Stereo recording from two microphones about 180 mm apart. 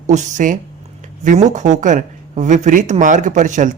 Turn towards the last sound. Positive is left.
turn(degrees=-45)  # may be behind; listen again after turning